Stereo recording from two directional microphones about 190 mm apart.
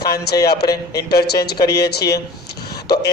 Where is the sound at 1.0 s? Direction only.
55° left (ahead or behind).